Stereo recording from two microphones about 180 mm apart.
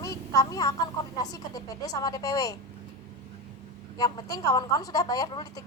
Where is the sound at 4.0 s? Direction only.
20° left (ahead or behind).